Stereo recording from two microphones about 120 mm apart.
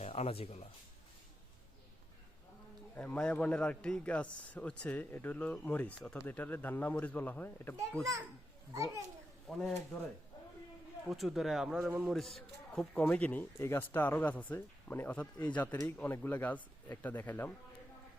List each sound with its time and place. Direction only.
0.0 s speech: 60° left (ahead or behind)
2.9 s a man's voice: 15° left (ahead or behind)
8.7 s a child's voice: 25° right (ahead or behind)
9.5 s speech: centre (ahead or behind)
11.1 s a man's voice: centre (ahead or behind); by 17.5 s 15° left (ahead or behind)